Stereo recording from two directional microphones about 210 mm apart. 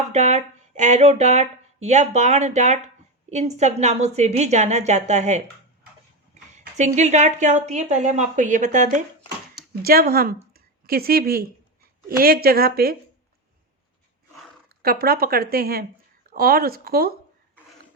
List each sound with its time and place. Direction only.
0.1 s a woman's voice: 30° right (ahead or behind)
9.8 s speech: 45° right (ahead or behind)
14.8 s speech: 45° right (ahead or behind)